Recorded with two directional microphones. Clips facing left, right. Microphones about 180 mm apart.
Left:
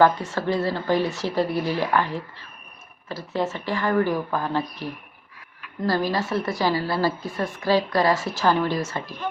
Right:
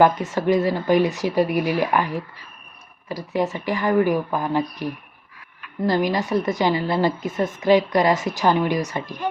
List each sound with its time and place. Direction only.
0.0 s a woman's voice: 15° right (ahead or behind)